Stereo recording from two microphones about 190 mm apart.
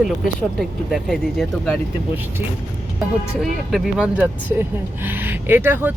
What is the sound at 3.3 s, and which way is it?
Speech, centre (ahead or behind).